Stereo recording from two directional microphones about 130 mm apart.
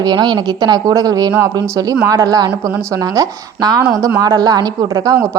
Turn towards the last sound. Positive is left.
turn(degrees=-30)  # may be behind; listen again after turning